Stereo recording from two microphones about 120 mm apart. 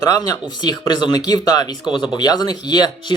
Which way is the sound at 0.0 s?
35° left (ahead or behind).